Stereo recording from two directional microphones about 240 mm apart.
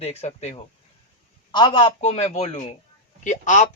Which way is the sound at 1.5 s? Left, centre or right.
Centre.